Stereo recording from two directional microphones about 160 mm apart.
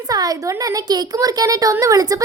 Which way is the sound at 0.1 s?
25° right (ahead or behind).